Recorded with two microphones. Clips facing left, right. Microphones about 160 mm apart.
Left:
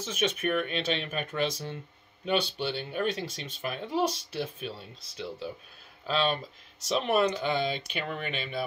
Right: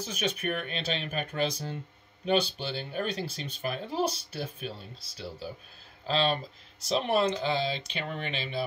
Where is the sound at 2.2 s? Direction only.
40° right (ahead or behind).